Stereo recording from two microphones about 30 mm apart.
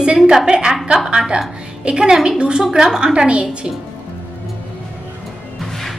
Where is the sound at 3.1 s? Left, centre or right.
Right.